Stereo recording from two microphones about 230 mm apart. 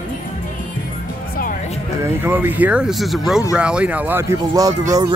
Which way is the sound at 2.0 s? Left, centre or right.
Centre.